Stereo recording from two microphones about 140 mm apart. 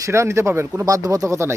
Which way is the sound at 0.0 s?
20° right (ahead or behind).